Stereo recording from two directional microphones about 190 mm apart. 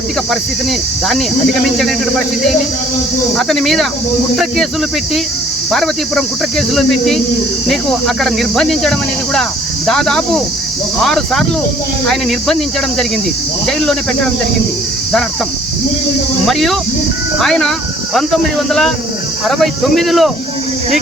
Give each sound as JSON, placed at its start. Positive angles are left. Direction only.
{"t": 3.3, "sound": "speech", "side_deg": 0}
{"t": 5.7, "sound": "speech", "side_deg": 0}
{"t": 16.5, "sound": "speech", "side_deg": 0}